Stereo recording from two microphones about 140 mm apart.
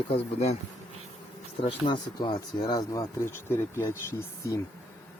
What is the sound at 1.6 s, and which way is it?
Speech, 40° left (ahead or behind).